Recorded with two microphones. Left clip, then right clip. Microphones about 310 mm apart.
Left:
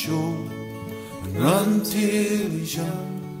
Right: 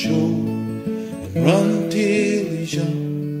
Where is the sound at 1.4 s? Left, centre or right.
Left.